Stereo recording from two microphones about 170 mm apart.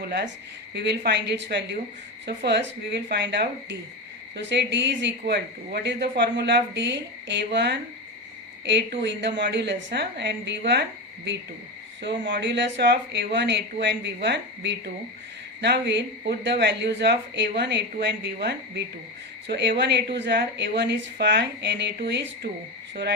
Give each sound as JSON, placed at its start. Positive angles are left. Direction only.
{"t": 0.0, "sound": "speech", "side_deg": -75}
{"t": 12.0, "sound": "speech", "side_deg": -90}
{"t": 19.5, "sound": "speech", "side_deg": -90}